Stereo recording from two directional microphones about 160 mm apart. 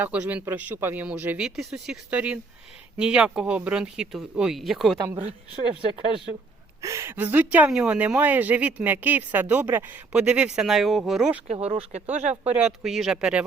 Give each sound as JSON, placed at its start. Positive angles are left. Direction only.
{"t": 0.0, "sound": "a woman's voice", "side_deg": -10}
{"t": 6.8, "sound": "a woman's voice", "side_deg": -15}
{"t": 11.4, "sound": "speech", "side_deg": -35}
{"t": 12.5, "sound": "speech", "side_deg": -5}